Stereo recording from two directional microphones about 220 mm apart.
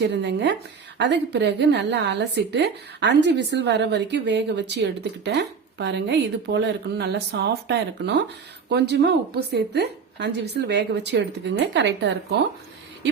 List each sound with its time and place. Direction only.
0.0 s a woman's voice: 50° right (ahead or behind)